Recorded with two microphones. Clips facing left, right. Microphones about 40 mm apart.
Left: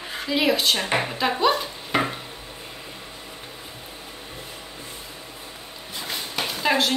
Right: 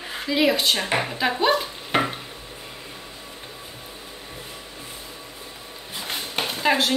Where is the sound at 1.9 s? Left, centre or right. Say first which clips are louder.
Right 1 dB; right.